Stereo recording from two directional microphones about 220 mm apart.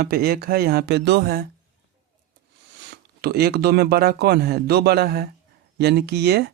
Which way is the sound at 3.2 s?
45° right (ahead or behind).